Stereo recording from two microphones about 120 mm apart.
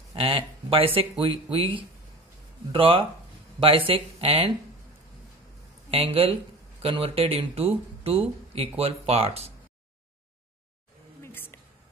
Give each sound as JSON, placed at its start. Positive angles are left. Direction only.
{"t": 0.1, "sound": "speech", "side_deg": -50}
{"t": 5.9, "sound": "speech", "side_deg": -55}
{"t": 11.2, "sound": "a sound", "side_deg": 20}